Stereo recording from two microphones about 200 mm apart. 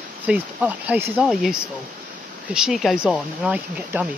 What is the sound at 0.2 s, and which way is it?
Speech, 10° right (ahead or behind).